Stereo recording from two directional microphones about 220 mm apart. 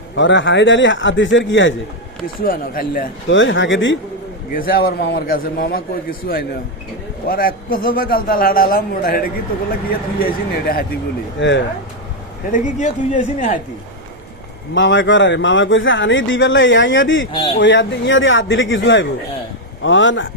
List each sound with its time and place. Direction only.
0.2 s speech: 55° left (ahead or behind)
2.2 s a man's voice: 40° left (ahead or behind)
3.2 s speech: 60° left (ahead or behind)
4.5 s a man's voice: 40° left (ahead or behind)
11.3 s speech: 55° left (ahead or behind)
12.5 s a man's voice: 35° left (ahead or behind)
14.8 s speech: 55° left (ahead or behind)